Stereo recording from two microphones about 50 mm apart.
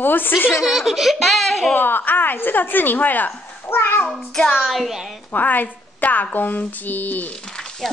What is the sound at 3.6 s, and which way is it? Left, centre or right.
Speech, left.